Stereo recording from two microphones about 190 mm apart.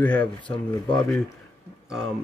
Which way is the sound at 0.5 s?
25° left (ahead or behind).